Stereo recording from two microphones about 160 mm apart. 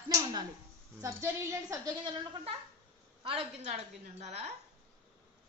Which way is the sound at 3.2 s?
40° right (ahead or behind).